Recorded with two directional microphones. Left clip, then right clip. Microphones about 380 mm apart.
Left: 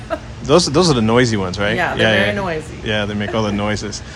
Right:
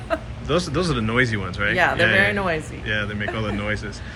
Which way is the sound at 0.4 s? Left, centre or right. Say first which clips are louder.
Left 11 dB; centre.